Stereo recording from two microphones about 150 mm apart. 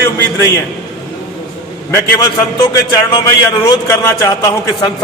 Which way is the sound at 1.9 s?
25° left (ahead or behind).